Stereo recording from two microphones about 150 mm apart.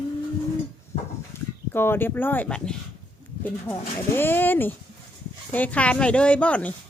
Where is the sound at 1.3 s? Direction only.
15° left (ahead or behind).